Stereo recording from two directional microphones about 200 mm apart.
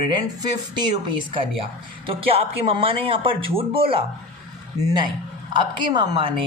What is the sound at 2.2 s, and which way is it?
Speech, 30° right (ahead or behind).